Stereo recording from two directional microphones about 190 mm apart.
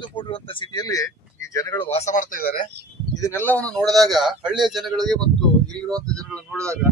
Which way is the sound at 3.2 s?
10° left (ahead or behind).